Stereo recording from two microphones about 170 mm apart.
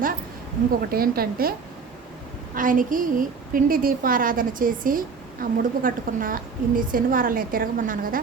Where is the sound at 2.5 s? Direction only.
50° right (ahead or behind).